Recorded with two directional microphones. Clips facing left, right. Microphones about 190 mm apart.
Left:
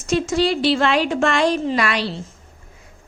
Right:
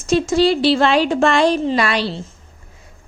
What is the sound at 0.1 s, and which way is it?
A woman's voice, 30° right (ahead or behind).